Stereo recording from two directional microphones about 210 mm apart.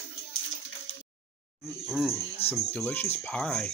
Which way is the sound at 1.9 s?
Centre (ahead or behind).